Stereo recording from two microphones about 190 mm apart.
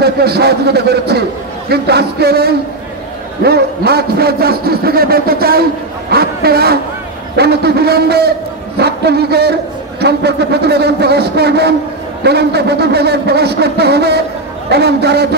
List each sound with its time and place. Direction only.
0.0 s a man's voice: 55° right (ahead or behind)